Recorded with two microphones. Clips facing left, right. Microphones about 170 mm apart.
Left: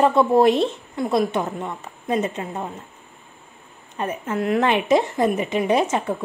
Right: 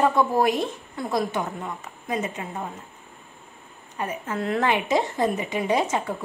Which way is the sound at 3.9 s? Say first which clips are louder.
Left 4 dB; 25° left (ahead or behind).